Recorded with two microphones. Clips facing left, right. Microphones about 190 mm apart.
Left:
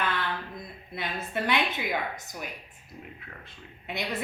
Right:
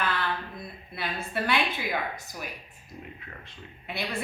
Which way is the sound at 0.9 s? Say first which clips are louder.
Even; 20° left (ahead or behind).